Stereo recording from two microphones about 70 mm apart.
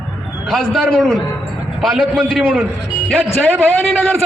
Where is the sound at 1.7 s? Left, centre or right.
Centre.